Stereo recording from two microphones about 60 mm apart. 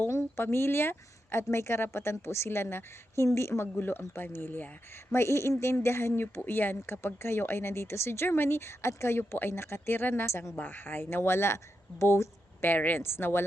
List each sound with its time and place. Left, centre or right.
0.0 s speech: left
3.2 s a woman's voice: left
5.1 s speech: left
6.4 s speech: left
10.5 s speech: left
12.7 s a woman's voice: left